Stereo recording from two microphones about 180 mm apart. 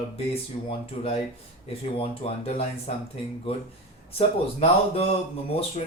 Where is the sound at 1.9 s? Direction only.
35° left (ahead or behind).